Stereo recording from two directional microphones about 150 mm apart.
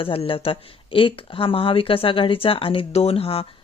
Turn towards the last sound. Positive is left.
turn(degrees=40)  # may be behind; listen again after turning